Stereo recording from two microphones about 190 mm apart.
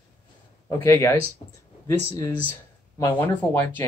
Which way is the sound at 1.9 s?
15° left (ahead or behind).